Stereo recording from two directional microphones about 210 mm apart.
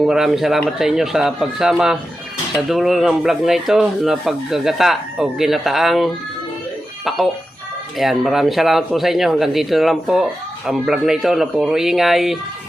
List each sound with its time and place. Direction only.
0.0 s speech: centre (ahead or behind)
7.9 s speech: centre (ahead or behind)